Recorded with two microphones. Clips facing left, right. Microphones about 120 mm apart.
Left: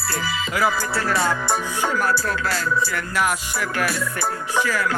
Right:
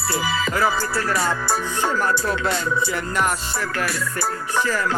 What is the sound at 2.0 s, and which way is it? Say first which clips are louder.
Music: right 1 dB; 5° left (ahead or behind).